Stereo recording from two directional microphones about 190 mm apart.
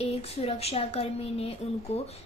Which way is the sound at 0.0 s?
30° left (ahead or behind).